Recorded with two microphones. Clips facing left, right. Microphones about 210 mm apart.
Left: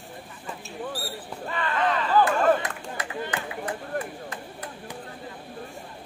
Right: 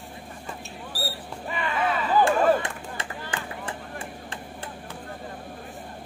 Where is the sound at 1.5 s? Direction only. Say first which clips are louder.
Left 1 dB; 10° right (ahead or behind).